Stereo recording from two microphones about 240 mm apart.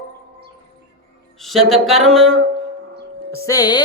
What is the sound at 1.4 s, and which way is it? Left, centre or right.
Music, centre.